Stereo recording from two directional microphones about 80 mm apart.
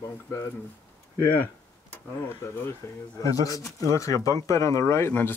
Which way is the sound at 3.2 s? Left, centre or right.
Left.